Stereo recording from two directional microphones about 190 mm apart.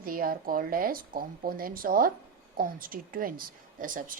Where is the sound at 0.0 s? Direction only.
50° right (ahead or behind).